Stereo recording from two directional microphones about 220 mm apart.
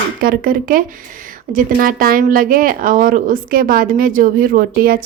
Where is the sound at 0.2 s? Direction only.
40° right (ahead or behind).